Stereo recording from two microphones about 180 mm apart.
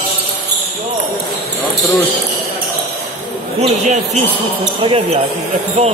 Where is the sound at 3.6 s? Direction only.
40° right (ahead or behind).